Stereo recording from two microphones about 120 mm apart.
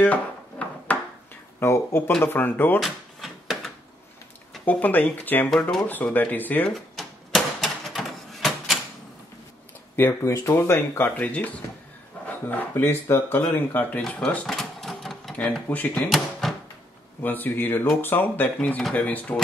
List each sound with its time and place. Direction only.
0.0 s dishes: 10° left (ahead or behind)
1.6 s speech: 20° left (ahead or behind)
2.8 s drawer open or close: centre (ahead or behind)
4.6 s speech: 15° left (ahead or behind)
5.5 s speech: 5° left (ahead or behind)
5.9 s speech: 15° left (ahead or behind)
6.7 s typewriter: centre (ahead or behind)
9.9 s speech: 20° left (ahead or behind); by 16.5 s centre (ahead or behind)
17.2 s speech: 15° left (ahead or behind)